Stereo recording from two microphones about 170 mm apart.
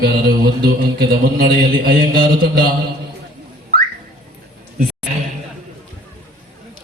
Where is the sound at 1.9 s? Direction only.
60° right (ahead or behind).